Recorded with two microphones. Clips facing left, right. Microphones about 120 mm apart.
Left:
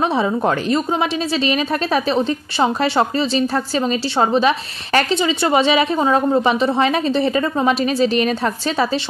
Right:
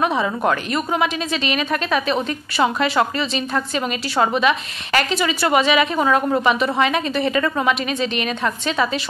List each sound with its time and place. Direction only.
0.0 s a woman's voice: 30° left (ahead or behind)